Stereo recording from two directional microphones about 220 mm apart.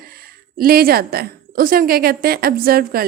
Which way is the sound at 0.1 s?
45° right (ahead or behind).